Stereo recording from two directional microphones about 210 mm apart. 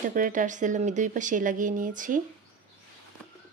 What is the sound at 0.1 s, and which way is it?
Speech, 40° right (ahead or behind).